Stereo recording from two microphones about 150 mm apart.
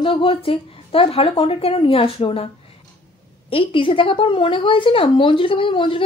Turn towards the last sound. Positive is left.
turn(degrees=35)  # may be behind; listen again after turning